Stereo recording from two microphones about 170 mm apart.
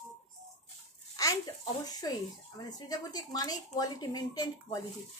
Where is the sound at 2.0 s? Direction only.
20° left (ahead or behind).